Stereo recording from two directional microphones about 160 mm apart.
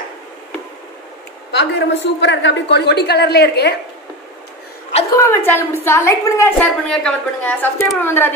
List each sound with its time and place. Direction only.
1.5 s a woman's voice: 90° left
5.1 s a woman's voice: 20° left (ahead or behind)
6.9 s a woman's voice: 5° left (ahead or behind)